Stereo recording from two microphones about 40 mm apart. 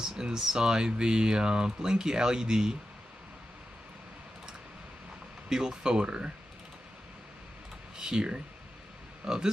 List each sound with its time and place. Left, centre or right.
0.2 s speech: centre
5.5 s speech: centre
8.0 s speech: centre